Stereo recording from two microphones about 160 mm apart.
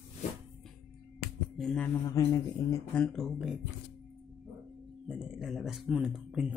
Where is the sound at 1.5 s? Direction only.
5° left (ahead or behind); by 2.7 s 20° left (ahead or behind).